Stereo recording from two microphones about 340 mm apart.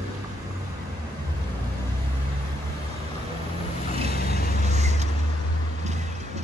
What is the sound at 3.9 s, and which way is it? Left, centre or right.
Vehicle, centre.